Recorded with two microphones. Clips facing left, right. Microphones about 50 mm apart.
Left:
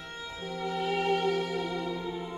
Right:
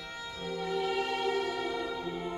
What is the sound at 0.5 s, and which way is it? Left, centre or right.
Music, left.